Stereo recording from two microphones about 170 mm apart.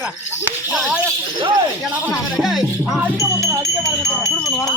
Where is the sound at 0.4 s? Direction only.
5° right (ahead or behind).